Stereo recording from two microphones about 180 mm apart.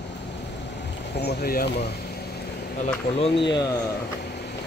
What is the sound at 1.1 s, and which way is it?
Speech, 65° left (ahead or behind).